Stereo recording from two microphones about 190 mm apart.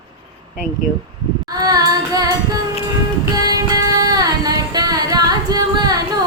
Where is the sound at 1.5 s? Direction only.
20° right (ahead or behind).